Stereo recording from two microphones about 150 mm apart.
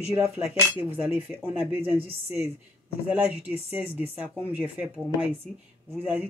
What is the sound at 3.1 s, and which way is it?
Speech, 10° right (ahead or behind).